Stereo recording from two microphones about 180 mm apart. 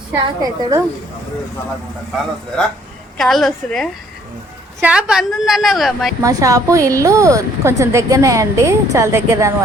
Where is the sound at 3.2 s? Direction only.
Centre (ahead or behind).